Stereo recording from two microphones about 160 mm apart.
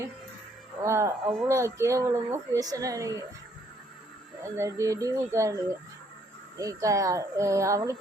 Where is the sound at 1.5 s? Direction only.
20° right (ahead or behind).